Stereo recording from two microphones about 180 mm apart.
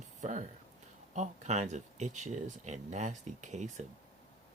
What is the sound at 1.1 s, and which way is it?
Speech, 40° right (ahead or behind).